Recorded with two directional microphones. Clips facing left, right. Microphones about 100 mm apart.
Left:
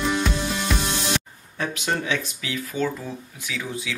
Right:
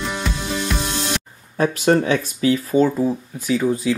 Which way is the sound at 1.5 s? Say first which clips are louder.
Right 10 dB; 45° right (ahead or behind).